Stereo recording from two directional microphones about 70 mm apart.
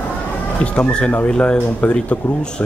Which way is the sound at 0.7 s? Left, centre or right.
Centre.